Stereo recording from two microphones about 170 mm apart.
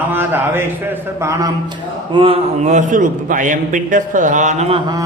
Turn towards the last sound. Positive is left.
turn(degrees=-40)  # may be behind; listen again after turning